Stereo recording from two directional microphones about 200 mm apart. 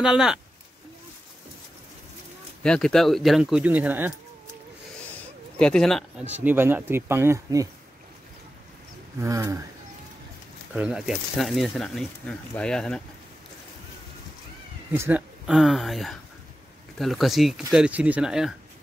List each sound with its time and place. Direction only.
0.0 s speech: 5° right (ahead or behind)
2.6 s speech: 5° left (ahead or behind)
5.6 s speech: 5° left (ahead or behind)
6.4 s speech: 10° right (ahead or behind)
9.2 s speech: 15° right (ahead or behind)
10.7 s speech: 5° right (ahead or behind)
14.9 s speech: 10° right (ahead or behind)